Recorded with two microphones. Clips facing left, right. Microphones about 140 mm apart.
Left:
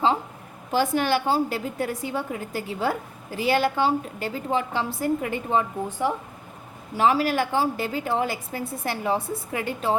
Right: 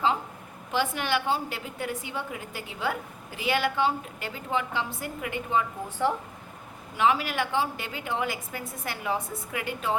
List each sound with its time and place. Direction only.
0.7 s a woman's voice: 40° left (ahead or behind)
6.9 s a woman's voice: 35° left (ahead or behind)